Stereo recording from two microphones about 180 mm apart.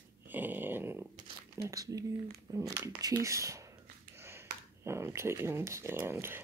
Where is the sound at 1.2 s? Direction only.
20° right (ahead or behind).